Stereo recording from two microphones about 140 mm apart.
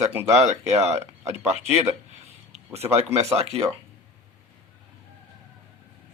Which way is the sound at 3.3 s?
45° right (ahead or behind).